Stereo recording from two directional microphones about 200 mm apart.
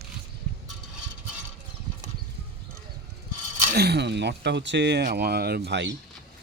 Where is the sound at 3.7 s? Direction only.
55° right (ahead or behind).